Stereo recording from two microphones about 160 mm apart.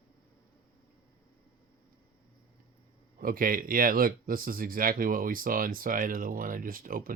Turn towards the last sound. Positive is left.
turn(degrees=-60)  # may be behind; listen again after turning